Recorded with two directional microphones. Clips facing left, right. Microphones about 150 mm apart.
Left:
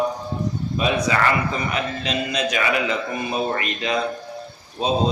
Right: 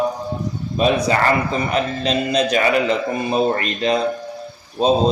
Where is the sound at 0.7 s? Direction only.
35° right (ahead or behind).